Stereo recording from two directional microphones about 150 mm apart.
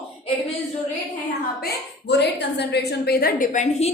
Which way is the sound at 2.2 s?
90° left.